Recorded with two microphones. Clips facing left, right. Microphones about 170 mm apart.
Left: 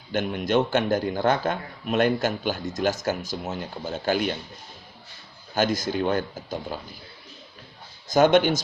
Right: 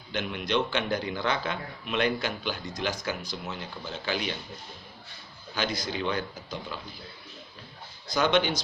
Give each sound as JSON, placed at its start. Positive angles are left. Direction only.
{"t": 0.1, "sound": "a man's voice", "side_deg": 45}
{"t": 5.5, "sound": "a man's voice", "side_deg": 45}
{"t": 8.1, "sound": "a man's voice", "side_deg": 50}